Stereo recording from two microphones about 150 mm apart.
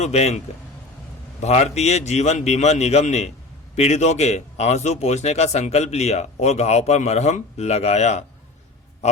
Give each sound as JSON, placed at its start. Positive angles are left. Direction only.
{"t": 0.0, "sound": "speech", "side_deg": 45}